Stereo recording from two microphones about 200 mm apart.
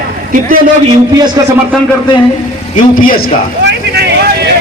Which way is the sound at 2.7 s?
45° left (ahead or behind).